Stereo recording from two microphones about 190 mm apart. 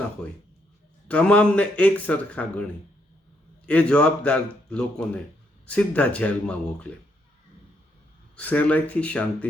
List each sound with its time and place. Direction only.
1.0 s speech: 5° left (ahead or behind)
3.7 s speech: 5° left (ahead or behind)
8.4 s speech: 10° left (ahead or behind)